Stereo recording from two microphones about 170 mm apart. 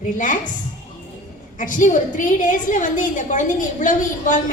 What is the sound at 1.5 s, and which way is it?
A woman's voice, 50° left (ahead or behind).